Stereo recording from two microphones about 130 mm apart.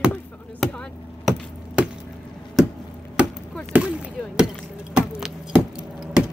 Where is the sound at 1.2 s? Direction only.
5° right (ahead or behind).